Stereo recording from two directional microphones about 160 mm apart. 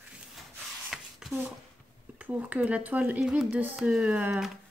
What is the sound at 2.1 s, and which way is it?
Speech, 10° right (ahead or behind).